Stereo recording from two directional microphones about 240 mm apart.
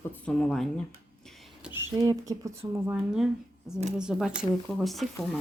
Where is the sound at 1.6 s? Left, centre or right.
Centre.